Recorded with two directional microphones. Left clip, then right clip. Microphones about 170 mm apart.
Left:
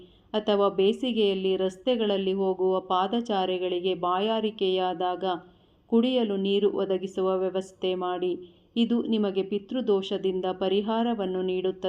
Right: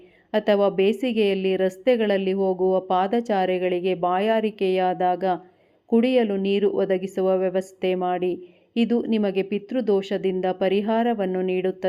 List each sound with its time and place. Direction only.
0.3 s a woman's voice: 35° right (ahead or behind)